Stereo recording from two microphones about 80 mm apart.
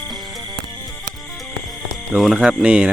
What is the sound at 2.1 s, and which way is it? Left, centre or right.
Speech, right.